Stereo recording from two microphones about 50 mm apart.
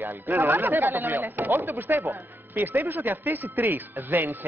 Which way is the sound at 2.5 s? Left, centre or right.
Right.